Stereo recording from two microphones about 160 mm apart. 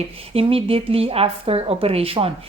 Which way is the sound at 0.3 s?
35° right (ahead or behind).